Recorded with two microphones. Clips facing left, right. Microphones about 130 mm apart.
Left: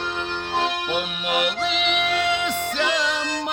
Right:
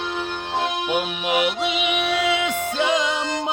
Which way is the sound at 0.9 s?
15° right (ahead or behind).